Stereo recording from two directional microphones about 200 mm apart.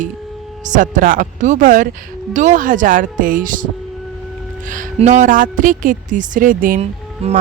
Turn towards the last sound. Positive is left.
turn(degrees=-35)  # may be behind; listen again after turning